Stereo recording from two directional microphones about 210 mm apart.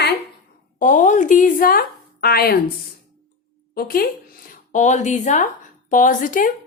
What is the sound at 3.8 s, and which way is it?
A woman's voice, 45° left (ahead or behind).